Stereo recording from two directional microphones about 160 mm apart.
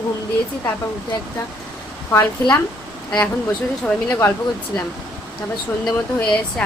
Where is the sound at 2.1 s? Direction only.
15° left (ahead or behind).